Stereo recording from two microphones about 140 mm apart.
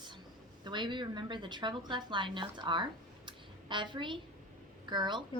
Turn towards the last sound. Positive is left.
turn(degrees=-35)  # may be behind; listen again after turning